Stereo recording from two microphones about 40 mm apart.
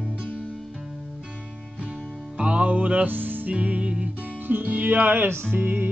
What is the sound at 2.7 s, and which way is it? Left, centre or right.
Music, right.